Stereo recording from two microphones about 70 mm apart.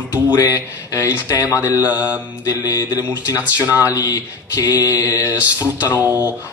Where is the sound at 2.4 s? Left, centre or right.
Left.